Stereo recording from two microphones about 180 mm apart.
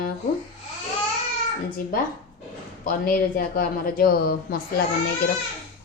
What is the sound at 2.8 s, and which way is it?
Speech, 55° left (ahead or behind).